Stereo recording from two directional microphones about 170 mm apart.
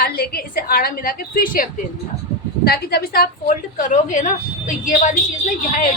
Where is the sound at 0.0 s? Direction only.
65° left (ahead or behind).